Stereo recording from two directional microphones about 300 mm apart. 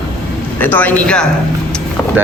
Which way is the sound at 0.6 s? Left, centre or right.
Centre.